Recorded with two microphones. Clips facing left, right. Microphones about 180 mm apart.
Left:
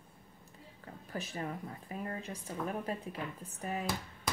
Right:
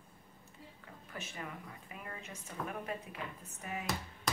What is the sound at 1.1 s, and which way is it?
A woman's voice, 35° left (ahead or behind).